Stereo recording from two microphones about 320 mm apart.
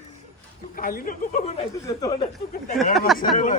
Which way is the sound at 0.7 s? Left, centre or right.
Left.